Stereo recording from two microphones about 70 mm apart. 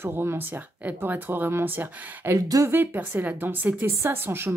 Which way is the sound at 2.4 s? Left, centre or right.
Right.